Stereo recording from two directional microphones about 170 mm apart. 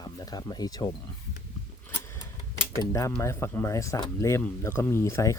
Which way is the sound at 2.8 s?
20° left (ahead or behind).